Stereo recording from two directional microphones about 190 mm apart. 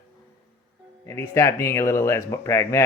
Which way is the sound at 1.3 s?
15° left (ahead or behind).